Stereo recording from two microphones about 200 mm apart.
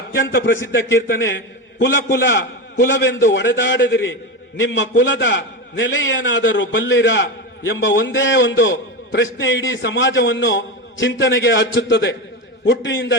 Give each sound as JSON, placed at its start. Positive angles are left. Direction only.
{"t": 0.1, "sound": "a man's voice", "side_deg": 55}